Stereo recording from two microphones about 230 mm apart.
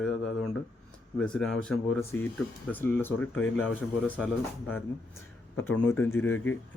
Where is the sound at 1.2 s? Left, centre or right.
Centre.